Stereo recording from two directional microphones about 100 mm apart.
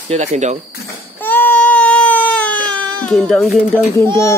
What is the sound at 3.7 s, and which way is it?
Speech, 25° left (ahead or behind).